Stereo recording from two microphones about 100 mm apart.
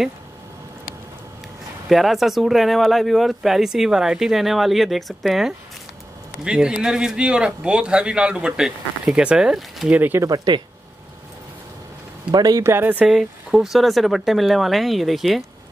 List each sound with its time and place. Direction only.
1.9 s a man's voice: centre (ahead or behind)
9.8 s a man's voice: 15° right (ahead or behind)
10.2 s speech: 45° right (ahead or behind)
12.3 s speech: 40° right (ahead or behind)
12.6 s speech: 20° right (ahead or behind)
13.0 s speech: 5° right (ahead or behind)